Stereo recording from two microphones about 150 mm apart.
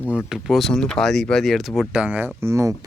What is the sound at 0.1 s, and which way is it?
Speech, 5° right (ahead or behind).